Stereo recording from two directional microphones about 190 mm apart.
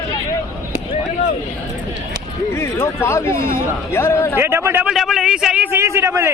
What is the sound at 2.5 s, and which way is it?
Speech, 15° left (ahead or behind).